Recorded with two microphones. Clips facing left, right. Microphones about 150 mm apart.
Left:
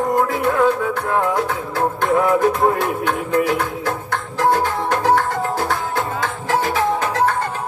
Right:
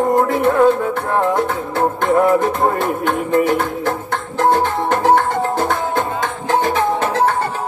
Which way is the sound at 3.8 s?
25° right (ahead or behind).